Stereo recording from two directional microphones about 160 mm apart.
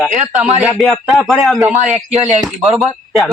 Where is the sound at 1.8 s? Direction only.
45° right (ahead or behind).